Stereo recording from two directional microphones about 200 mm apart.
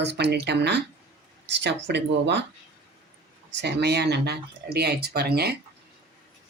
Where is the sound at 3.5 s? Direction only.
55° right (ahead or behind).